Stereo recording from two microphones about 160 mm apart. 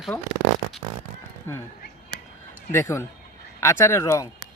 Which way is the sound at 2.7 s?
15° left (ahead or behind).